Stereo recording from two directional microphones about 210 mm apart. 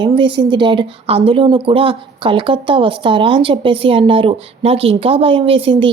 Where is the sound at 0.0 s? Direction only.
25° right (ahead or behind).